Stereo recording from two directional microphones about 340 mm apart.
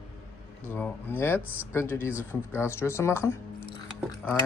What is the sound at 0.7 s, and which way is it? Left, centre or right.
Speech, centre.